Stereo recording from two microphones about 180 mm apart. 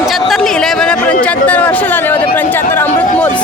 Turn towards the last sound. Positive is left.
turn(degrees=10)  # may be behind; listen again after turning